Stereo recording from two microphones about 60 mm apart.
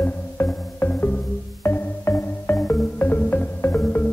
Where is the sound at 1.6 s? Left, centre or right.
Left.